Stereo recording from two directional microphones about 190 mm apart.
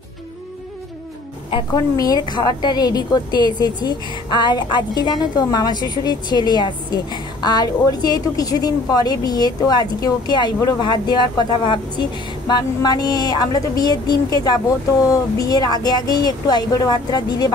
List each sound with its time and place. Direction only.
1.5 s a woman's voice: 20° left (ahead or behind)